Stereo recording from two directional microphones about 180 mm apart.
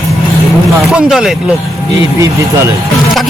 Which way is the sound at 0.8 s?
5° right (ahead or behind).